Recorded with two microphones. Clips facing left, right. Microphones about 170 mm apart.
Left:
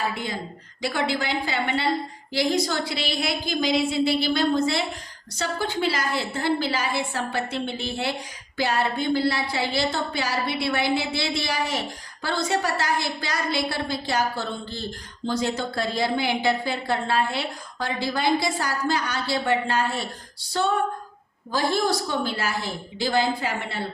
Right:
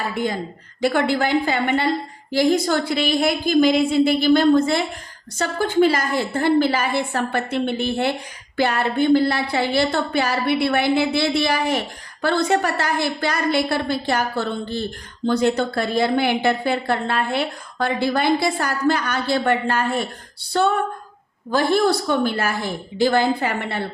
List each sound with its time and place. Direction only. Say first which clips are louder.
0.8 s a woman's voice: right 7 dB; 50° right (ahead or behind)